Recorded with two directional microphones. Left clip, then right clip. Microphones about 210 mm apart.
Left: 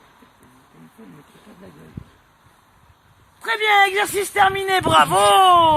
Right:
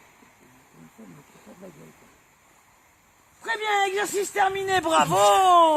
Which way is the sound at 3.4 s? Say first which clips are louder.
Left 8 dB; 45° right (ahead or behind).